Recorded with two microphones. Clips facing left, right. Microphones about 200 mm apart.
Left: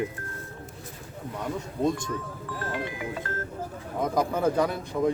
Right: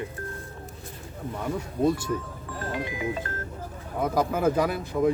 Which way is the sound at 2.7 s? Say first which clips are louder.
Right 5 dB; 15° right (ahead or behind).